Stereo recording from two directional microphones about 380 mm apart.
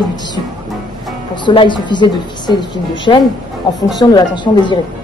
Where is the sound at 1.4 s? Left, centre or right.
Centre.